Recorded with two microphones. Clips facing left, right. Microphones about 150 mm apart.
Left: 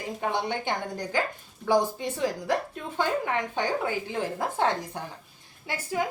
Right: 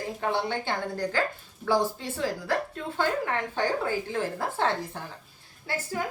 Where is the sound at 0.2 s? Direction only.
15° left (ahead or behind).